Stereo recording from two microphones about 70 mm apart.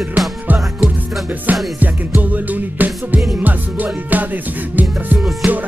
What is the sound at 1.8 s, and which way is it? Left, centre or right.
Music, right.